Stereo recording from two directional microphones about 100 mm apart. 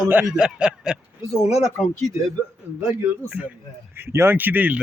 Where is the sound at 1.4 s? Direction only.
90° left.